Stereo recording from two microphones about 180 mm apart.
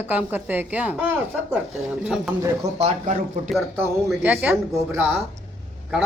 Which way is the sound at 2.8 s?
35° right (ahead or behind).